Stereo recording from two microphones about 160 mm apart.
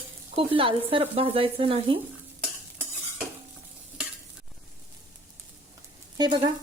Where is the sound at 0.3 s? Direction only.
35° right (ahead or behind).